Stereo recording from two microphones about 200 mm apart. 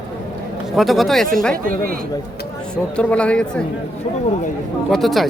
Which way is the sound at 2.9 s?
5° left (ahead or behind).